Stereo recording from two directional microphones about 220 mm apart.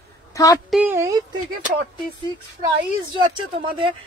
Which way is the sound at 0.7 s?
10° right (ahead or behind).